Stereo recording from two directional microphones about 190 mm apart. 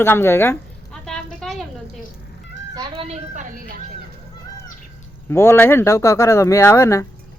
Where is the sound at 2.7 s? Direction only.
25° right (ahead or behind); by 3.7 s 45° right (ahead or behind).